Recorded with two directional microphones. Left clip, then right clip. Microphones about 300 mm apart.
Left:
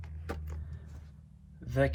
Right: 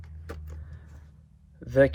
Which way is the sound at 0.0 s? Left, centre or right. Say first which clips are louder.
Left 1 dB; centre.